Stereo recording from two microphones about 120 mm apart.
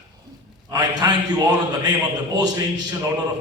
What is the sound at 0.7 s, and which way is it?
A man's voice, 35° right (ahead or behind).